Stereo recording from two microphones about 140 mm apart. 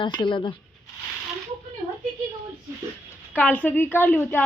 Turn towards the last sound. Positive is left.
turn(degrees=15)  # may be behind; listen again after turning